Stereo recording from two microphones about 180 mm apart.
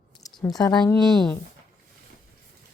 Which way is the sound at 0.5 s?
20° left (ahead or behind).